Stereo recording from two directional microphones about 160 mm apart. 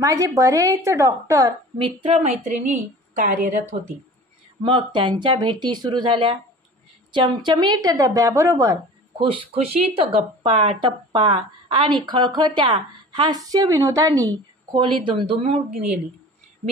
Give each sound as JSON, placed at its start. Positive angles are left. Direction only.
{"t": 0.0, "sound": "a woman's voice", "side_deg": -20}
{"t": 2.0, "sound": "a woman's voice", "side_deg": -45}
{"t": 4.6, "sound": "a woman's voice", "side_deg": -35}
{"t": 9.2, "sound": "a woman's voice", "side_deg": -35}